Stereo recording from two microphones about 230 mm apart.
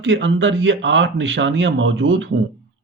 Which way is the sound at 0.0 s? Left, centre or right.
Right.